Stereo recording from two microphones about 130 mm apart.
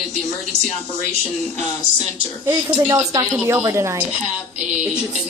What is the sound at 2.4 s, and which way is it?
Speech, 25° right (ahead or behind).